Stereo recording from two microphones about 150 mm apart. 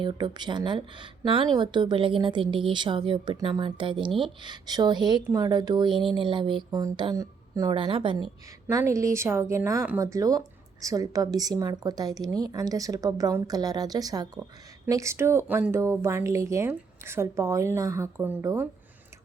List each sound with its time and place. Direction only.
0.0 s a woman's voice: 30° right (ahead or behind)
7.8 s a woman's voice: 35° right (ahead or behind)
8.7 s a woman's voice: 20° right (ahead or behind)